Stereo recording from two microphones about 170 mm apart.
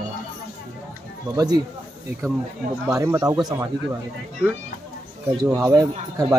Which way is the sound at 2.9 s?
20° right (ahead or behind).